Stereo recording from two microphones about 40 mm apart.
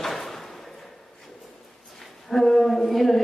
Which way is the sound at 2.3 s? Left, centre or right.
Centre.